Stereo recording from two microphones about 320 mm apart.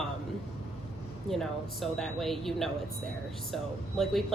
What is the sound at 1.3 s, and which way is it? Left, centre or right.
Speech, centre.